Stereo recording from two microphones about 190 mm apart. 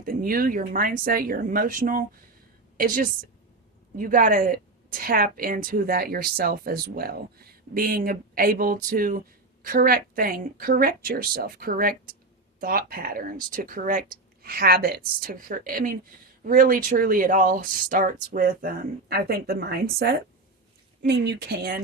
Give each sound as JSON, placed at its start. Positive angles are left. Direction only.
{"t": 0.0, "sound": "speech", "side_deg": -50}